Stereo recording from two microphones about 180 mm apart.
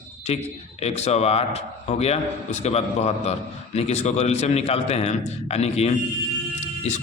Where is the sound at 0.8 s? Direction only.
35° left (ahead or behind).